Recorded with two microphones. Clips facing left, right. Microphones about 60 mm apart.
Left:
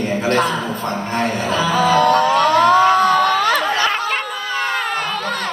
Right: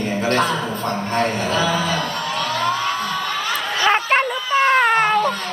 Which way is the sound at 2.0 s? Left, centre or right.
Left.